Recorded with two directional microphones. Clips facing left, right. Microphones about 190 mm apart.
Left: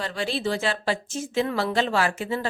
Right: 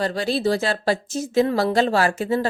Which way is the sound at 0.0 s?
40° right (ahead or behind).